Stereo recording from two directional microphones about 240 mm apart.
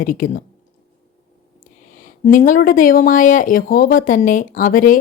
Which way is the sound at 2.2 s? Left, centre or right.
Left.